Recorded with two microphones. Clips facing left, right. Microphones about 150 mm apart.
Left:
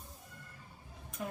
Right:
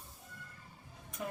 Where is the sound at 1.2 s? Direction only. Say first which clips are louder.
Even; centre (ahead or behind).